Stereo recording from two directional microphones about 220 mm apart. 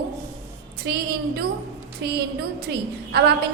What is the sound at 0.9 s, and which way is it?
Speech, 45° right (ahead or behind).